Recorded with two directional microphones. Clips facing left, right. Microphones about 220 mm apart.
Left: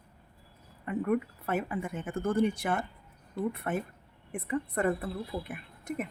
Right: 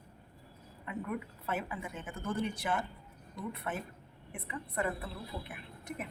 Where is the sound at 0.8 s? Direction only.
50° left (ahead or behind).